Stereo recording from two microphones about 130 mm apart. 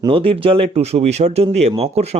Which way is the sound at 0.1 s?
45° right (ahead or behind).